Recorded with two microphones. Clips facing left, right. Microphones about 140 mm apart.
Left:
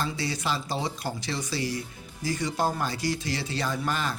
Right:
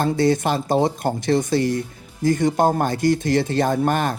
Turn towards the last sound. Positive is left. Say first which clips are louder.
# right 10 dB
turn(degrees=-55)  # may be behind; listen again after turning